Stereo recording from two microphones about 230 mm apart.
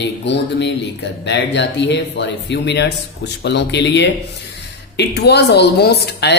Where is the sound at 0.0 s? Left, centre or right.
Left.